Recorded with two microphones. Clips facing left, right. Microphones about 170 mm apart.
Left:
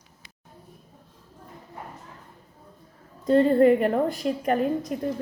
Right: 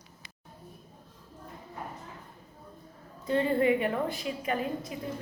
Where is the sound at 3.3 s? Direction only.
40° left (ahead or behind).